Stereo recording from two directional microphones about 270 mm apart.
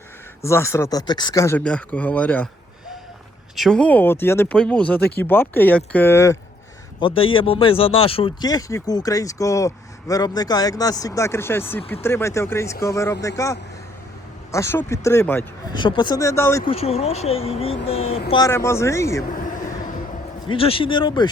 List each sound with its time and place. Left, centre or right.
0.4 s speech: centre
3.5 s speech: centre
16.7 s speech: left
19.4 s vehicle: left
20.5 s speech: centre